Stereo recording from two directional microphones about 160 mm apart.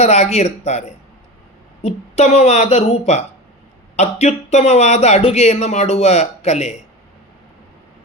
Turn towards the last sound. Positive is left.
turn(degrees=45)  # may be behind; listen again after turning